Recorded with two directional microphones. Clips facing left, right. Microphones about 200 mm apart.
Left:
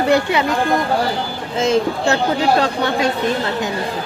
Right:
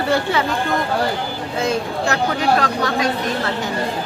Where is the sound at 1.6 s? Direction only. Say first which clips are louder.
Left 5 dB; 25° left (ahead or behind).